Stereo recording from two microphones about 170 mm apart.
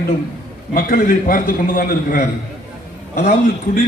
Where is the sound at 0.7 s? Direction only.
55° left (ahead or behind).